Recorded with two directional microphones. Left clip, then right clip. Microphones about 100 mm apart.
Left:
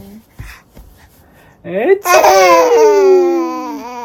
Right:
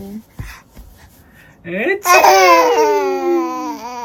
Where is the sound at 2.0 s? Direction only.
35° left (ahead or behind).